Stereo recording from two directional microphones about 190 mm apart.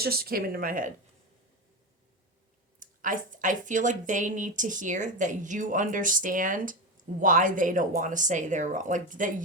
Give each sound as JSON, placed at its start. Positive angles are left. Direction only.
{"t": 0.0, "sound": "speech", "side_deg": -50}
{"t": 2.8, "sound": "speech", "side_deg": -45}